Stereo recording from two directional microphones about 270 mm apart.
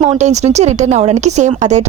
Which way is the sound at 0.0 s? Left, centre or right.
Right.